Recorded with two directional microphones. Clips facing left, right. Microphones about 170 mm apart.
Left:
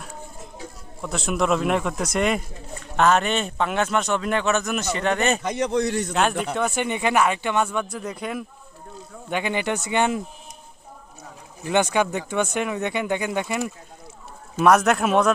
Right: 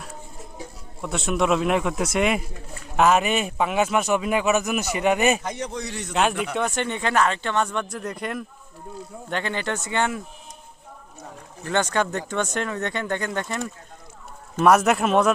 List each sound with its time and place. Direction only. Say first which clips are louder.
1.0 s a man's voice: right 1 dB; centre (ahead or behind)
5.4 s a man's voice: left 7 dB; 85° left; by 6.0 s 60° left (ahead or behind)
6.4 s speech: left 1 dB; centre (ahead or behind)
9.3 s speech: left 3 dB; 15° left (ahead or behind)
11.6 s speech: left 2 dB; 10° left (ahead or behind)
14.6 s a man's voice: even; centre (ahead or behind)